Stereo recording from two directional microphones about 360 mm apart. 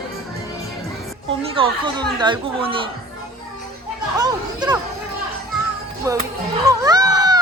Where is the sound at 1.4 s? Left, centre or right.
Centre.